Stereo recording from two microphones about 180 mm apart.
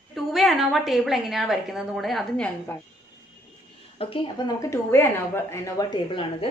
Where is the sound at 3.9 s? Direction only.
30° left (ahead or behind).